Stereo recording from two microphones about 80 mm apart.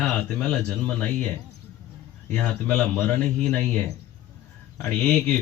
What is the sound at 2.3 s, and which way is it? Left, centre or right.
A man's voice, centre.